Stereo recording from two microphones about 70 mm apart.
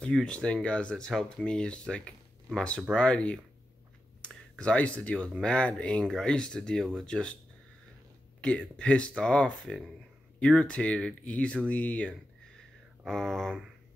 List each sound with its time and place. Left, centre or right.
0.0 s speech: centre
4.6 s speech: centre
8.4 s speech: centre
13.0 s speech: centre